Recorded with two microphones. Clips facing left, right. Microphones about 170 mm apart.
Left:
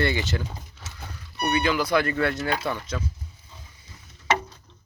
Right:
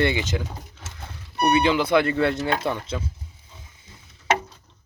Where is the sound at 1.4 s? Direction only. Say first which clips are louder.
Right 4 dB; 25° right (ahead or behind).